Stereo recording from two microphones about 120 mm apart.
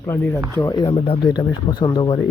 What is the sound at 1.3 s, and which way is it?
Speech, 35° left (ahead or behind).